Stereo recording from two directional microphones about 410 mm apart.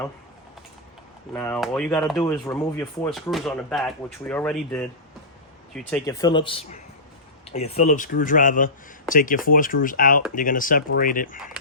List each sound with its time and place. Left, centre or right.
1.3 s speech: centre